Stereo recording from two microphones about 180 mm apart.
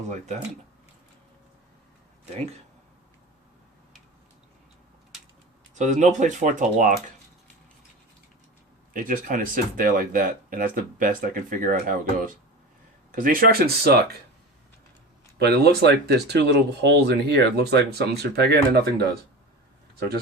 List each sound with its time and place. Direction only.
0.1 s speech: 40° right (ahead or behind)
5.7 s speech: 40° right (ahead or behind)
8.9 s speech: 50° right (ahead or behind)
15.4 s speech: 65° right (ahead or behind)